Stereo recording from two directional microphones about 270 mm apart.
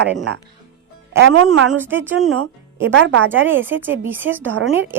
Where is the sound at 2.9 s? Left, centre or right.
Right.